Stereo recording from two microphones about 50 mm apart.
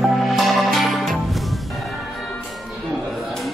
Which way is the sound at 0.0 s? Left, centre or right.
Centre.